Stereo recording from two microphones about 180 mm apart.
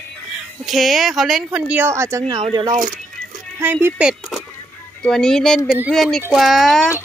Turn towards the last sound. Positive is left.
turn(degrees=0)  # may be behind; listen again after turning